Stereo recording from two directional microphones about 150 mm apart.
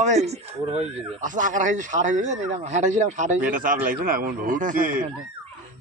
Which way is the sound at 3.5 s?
65° right (ahead or behind).